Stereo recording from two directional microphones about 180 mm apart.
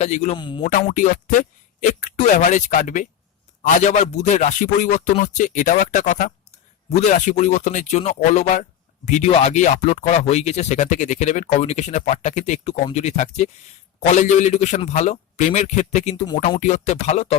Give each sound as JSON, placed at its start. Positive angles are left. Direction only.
{"t": 0.0, "sound": "speech", "side_deg": 40}
{"t": 0.3, "sound": "speech", "side_deg": 25}
{"t": 0.6, "sound": "a man's voice", "side_deg": 40}